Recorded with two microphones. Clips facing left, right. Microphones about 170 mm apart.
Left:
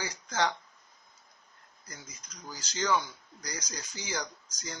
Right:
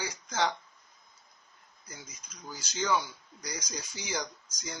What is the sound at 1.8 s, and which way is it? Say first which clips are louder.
Speech: even; 10° right (ahead or behind).